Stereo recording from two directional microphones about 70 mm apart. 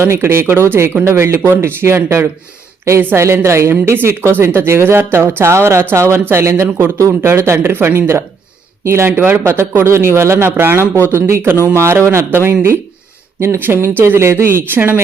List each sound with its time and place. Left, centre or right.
0.0 s speech: right
3.4 s speech: right